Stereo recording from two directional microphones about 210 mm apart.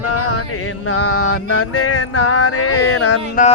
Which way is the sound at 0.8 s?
75° left (ahead or behind).